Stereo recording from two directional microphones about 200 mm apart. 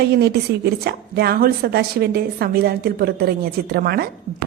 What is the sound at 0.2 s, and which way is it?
A woman's voice, 55° right (ahead or behind).